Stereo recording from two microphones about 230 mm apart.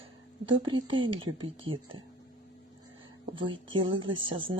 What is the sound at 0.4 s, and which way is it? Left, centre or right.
Speech, right.